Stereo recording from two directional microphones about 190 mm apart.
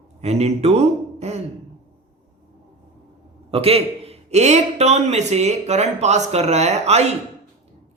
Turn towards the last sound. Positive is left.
turn(degrees=-35)  # may be behind; listen again after turning